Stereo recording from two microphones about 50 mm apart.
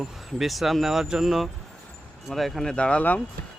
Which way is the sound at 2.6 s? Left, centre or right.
Left.